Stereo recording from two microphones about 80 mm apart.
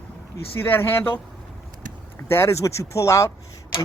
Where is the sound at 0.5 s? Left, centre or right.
Left.